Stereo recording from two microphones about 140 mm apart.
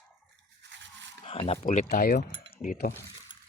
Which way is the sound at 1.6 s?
60° left (ahead or behind).